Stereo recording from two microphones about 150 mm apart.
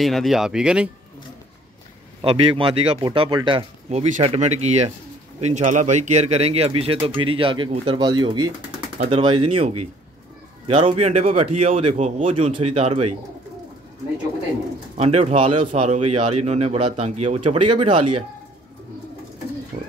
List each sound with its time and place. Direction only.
0.0 s speech: centre (ahead or behind)
2.2 s speech: 40° right (ahead or behind)
15.0 s speech: 45° right (ahead or behind)
19.7 s pigeon: 70° right (ahead or behind)